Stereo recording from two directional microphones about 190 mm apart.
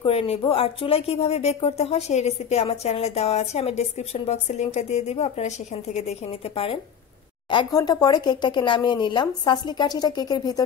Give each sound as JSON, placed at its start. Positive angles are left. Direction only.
{"t": 0.0, "sound": "speech", "side_deg": 30}
{"t": 7.5, "sound": "speech", "side_deg": 20}